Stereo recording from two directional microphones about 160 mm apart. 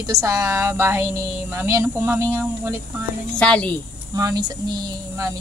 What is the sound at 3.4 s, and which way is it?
Speech, 5° left (ahead or behind).